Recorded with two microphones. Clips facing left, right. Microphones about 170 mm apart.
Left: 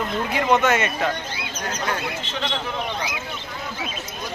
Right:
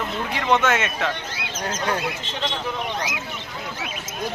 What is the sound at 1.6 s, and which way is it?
Speech, 30° right (ahead or behind).